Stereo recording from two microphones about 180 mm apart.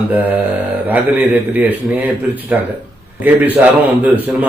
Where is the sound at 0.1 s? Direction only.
10° right (ahead or behind).